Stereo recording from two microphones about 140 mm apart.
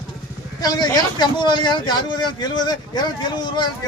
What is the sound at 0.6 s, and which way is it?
Speech, 30° left (ahead or behind).